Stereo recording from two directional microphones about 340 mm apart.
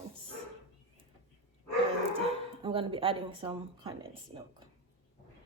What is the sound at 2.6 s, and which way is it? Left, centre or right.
A woman's voice, centre.